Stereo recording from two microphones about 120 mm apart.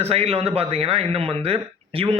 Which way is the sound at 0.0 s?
55° right (ahead or behind).